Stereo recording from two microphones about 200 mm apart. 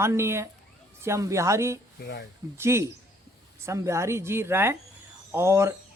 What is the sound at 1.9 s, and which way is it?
Speech, 55° left (ahead or behind).